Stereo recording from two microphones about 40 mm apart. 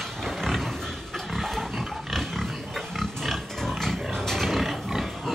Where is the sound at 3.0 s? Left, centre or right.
Centre.